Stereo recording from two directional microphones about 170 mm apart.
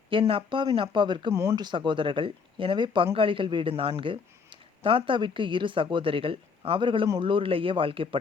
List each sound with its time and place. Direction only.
0.1 s speech: 30° right (ahead or behind)
1.3 s speech: 15° right (ahead or behind); by 8.2 s 30° right (ahead or behind)